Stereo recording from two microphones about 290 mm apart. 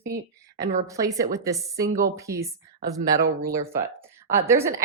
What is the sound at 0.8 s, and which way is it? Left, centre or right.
A woman's voice, centre.